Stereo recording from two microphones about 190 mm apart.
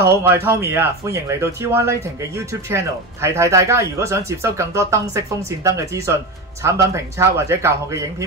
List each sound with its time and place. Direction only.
0.1 s speech: 15° right (ahead or behind)